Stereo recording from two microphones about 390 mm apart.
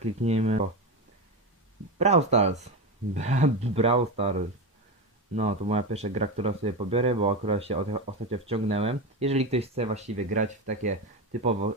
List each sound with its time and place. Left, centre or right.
0.0 s speech: centre
2.0 s speech: centre